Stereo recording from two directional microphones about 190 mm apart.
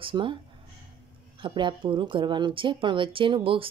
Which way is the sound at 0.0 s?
25° right (ahead or behind).